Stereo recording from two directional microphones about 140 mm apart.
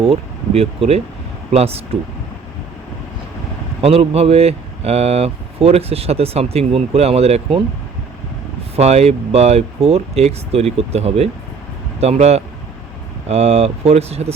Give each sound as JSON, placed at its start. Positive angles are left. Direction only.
{"t": 0.0, "sound": "speech", "side_deg": -45}
{"t": 3.8, "sound": "speech", "side_deg": -45}
{"t": 8.7, "sound": "speech", "side_deg": -50}